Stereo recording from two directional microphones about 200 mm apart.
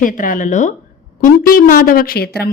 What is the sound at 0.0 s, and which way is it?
A woman's voice, 40° left (ahead or behind).